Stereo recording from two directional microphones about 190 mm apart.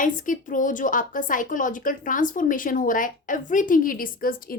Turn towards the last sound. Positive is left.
turn(degrees=50)  # may be behind; listen again after turning